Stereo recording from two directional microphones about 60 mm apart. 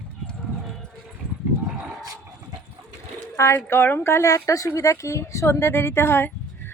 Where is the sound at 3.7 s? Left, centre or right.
Left.